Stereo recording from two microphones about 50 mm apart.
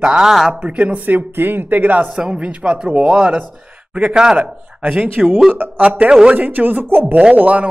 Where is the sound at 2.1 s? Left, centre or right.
Right.